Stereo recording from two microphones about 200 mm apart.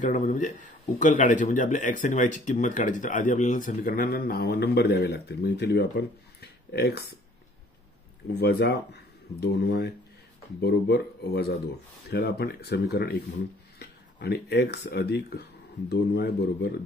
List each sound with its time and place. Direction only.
0.0 s speech: 40° left (ahead or behind); by 7.2 s 55° left (ahead or behind)
8.3 s speech: 55° left (ahead or behind)